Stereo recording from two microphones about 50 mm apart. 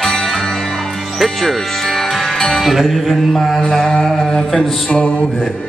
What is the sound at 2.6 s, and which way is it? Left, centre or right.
Mantra, centre.